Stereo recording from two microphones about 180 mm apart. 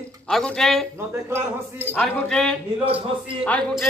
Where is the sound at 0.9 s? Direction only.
10° right (ahead or behind).